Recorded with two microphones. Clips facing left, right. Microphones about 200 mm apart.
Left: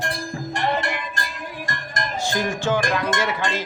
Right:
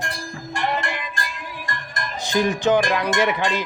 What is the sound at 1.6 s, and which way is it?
Music, 45° left (ahead or behind).